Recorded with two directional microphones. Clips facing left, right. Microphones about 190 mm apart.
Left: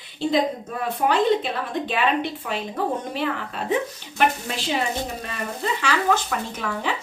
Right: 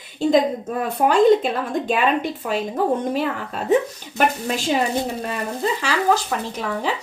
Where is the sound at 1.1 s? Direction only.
45° right (ahead or behind).